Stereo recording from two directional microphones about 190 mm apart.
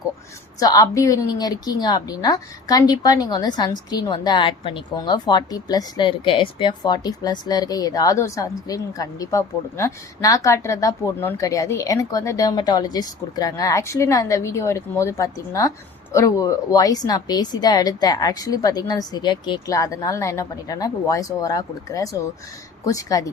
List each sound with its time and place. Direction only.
0.6 s a woman's voice: 20° left (ahead or behind)